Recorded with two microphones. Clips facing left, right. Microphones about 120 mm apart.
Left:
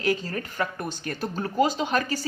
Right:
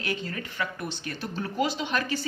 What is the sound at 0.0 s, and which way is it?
A woman's voice, 40° left (ahead or behind).